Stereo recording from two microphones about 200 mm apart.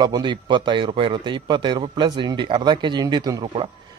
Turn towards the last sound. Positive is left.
turn(degrees=-25)  # may be behind; listen again after turning